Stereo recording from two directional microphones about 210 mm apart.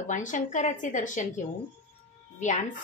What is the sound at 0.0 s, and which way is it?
Speech, 35° left (ahead or behind).